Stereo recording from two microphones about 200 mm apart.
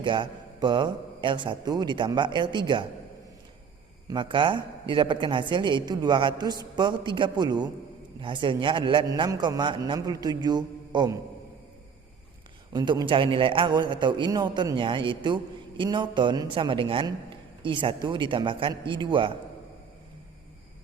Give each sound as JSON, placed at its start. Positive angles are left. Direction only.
{"t": 0.0, "sound": "a man's voice", "side_deg": -25}
{"t": 4.1, "sound": "a man's voice", "side_deg": -25}
{"t": 12.7, "sound": "a man's voice", "side_deg": -20}